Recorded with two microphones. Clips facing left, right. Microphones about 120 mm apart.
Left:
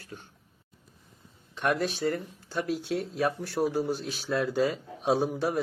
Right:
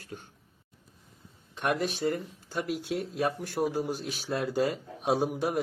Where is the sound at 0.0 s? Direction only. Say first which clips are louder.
Right 2 dB; 45° right (ahead or behind).